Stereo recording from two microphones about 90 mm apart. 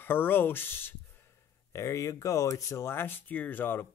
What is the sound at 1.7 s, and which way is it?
Speech, 35° left (ahead or behind).